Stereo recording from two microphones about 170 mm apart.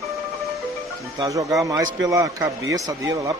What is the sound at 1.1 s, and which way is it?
Speech, 20° right (ahead or behind).